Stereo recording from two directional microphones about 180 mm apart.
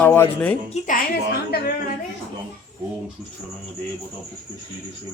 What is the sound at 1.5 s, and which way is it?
Speech, 60° left (ahead or behind).